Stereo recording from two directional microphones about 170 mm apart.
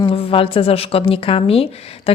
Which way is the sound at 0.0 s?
30° left (ahead or behind).